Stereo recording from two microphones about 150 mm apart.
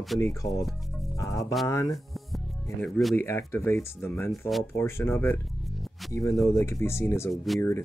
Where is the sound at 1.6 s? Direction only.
20° left (ahead or behind).